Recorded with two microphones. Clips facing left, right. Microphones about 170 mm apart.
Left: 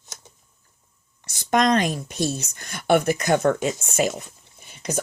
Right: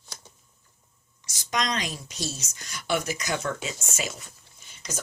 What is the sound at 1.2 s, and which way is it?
Speech, 60° left (ahead or behind).